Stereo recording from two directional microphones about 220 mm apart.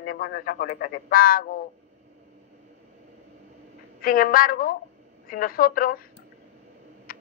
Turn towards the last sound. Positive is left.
turn(degrees=40)  # may be behind; listen again after turning